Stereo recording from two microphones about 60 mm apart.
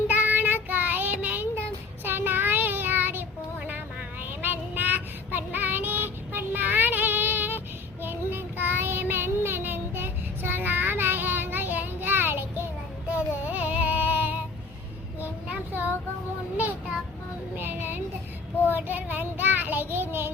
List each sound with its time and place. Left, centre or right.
0.1 s child singing: right
15.7 s child singing: right
17.6 s child singing: right